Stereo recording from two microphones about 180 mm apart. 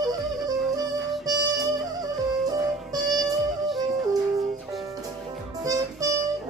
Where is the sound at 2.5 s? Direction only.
20° right (ahead or behind).